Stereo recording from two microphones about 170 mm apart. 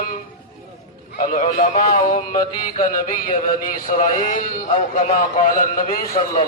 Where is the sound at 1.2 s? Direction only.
50° left (ahead or behind).